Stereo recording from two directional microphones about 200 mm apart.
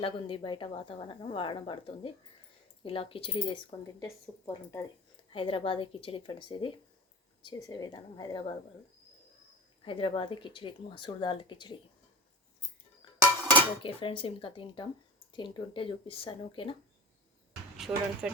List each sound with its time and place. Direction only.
0.0 s a woman's voice: 25° left (ahead or behind)
5.3 s a woman's voice: 25° left (ahead or behind)
9.8 s a woman's voice: 25° left (ahead or behind)
13.8 s a woman's voice: 25° left (ahead or behind)
17.7 s speech: 5° right (ahead or behind)